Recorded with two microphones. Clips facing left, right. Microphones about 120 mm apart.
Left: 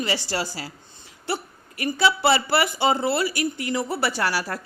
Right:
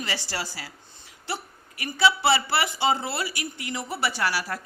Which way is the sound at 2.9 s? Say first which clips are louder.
Left 5 dB; 30° left (ahead or behind).